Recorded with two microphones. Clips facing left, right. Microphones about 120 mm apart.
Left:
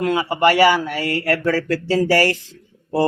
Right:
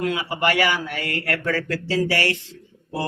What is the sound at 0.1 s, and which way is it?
A man's voice, 35° left (ahead or behind).